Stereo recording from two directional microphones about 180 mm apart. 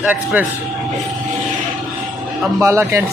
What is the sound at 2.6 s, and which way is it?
Speech, 15° right (ahead or behind).